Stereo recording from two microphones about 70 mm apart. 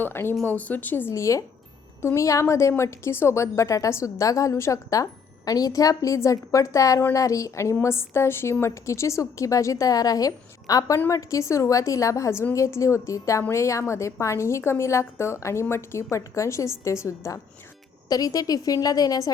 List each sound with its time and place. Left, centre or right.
0.0 s speech: left
0.4 s speech: left
1.1 s speech: left
5.5 s speech: left
18.1 s a woman's voice: left